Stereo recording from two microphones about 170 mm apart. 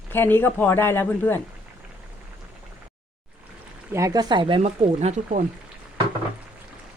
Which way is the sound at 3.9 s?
20° right (ahead or behind).